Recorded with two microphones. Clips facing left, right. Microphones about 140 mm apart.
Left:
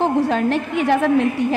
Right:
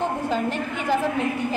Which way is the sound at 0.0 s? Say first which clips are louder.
Left 7 dB; 80° left.